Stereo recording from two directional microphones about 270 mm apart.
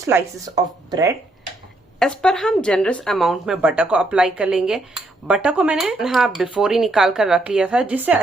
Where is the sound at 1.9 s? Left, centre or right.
Centre.